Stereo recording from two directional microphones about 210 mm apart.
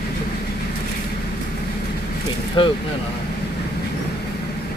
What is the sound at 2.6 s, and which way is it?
Speech, 20° left (ahead or behind).